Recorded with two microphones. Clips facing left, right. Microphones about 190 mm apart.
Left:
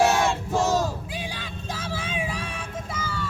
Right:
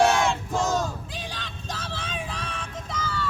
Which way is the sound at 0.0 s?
5° left (ahead or behind).